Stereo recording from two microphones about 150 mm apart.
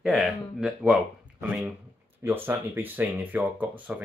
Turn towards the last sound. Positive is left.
turn(degrees=-10)  # may be behind; listen again after turning